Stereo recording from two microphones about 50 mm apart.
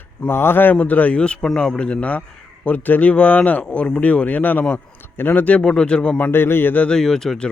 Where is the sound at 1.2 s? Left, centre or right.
Centre; by 5.4 s left.